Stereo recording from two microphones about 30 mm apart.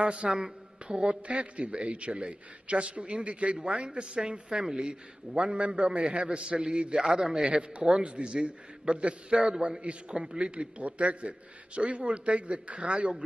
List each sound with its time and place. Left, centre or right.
0.0 s a man's voice: right
7.0 s a man's voice: right
7.4 s a man's voice: right
10.8 s a man's voice: right